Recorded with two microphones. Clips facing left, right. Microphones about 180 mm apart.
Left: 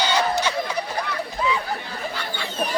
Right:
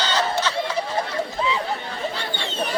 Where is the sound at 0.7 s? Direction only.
25° right (ahead or behind).